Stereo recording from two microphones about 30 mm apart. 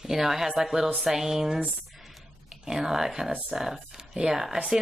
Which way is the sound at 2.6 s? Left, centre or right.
Centre.